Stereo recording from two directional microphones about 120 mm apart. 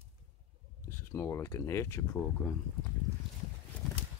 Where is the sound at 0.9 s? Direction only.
20° left (ahead or behind).